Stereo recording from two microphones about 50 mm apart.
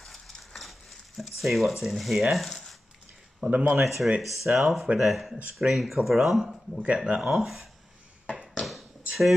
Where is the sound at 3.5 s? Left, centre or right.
Right.